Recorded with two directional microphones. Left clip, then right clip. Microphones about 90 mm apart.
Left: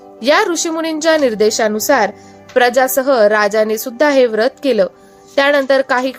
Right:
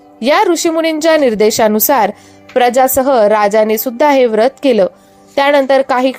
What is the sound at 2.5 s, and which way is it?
Speech, 35° right (ahead or behind).